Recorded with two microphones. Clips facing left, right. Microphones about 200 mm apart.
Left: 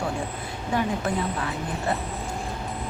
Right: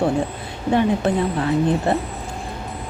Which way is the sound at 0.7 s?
25° right (ahead or behind).